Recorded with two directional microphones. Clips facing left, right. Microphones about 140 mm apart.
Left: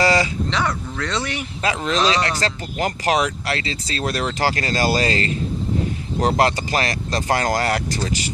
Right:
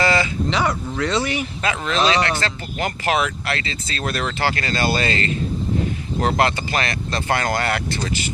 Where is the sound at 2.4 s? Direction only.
35° left (ahead or behind).